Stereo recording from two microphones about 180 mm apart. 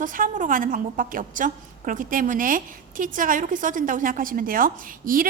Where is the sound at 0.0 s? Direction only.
50° right (ahead or behind).